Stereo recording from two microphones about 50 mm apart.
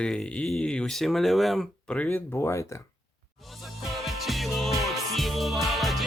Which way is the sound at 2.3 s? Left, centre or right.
Left.